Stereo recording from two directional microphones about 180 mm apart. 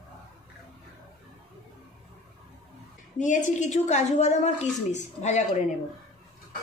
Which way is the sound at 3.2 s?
45° left (ahead or behind).